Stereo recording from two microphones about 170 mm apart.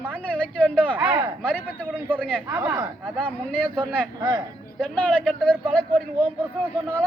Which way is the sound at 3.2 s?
5° left (ahead or behind).